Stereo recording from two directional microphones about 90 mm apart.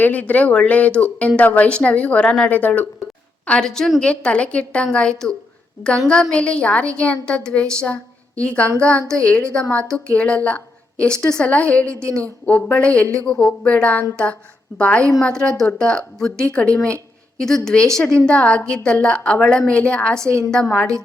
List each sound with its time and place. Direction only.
0.0 s a woman's voice: 15° left (ahead or behind)
6.3 s a woman's voice: 10° left (ahead or behind)